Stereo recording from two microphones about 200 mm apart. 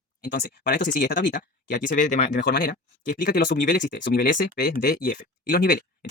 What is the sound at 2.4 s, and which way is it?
Speech, 55° left (ahead or behind).